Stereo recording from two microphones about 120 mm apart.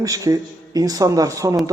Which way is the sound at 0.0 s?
30° right (ahead or behind).